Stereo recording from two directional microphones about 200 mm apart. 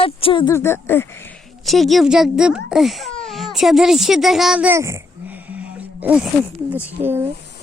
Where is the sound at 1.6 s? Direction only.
Centre (ahead or behind).